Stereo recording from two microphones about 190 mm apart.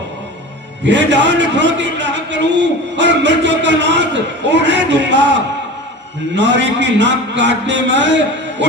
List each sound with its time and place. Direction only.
0.9 s a man's voice: 70° right (ahead or behind)
6.3 s a man's voice: 65° right (ahead or behind)